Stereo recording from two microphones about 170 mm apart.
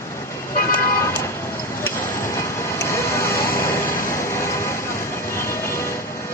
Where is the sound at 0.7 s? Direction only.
15° left (ahead or behind).